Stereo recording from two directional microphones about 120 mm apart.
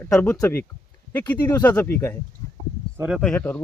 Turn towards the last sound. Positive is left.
turn(degrees=10)  # may be behind; listen again after turning